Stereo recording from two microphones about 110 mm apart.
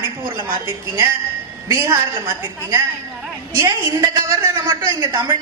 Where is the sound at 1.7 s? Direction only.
25° right (ahead or behind).